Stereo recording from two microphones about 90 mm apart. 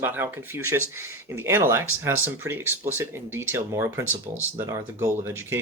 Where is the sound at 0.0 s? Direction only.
25° right (ahead or behind).